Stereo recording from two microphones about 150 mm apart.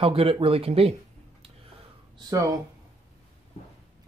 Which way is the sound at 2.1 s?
25° right (ahead or behind).